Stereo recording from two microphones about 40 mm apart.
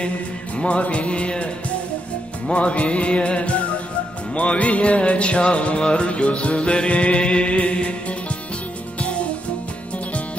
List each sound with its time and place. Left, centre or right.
0.6 s music: left
2.5 s music: left